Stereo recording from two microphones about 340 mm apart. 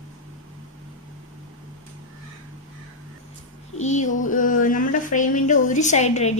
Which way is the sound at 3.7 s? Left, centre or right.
Left.